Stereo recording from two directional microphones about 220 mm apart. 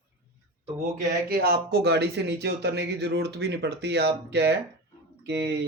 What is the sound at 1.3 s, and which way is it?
Speech, 45° right (ahead or behind).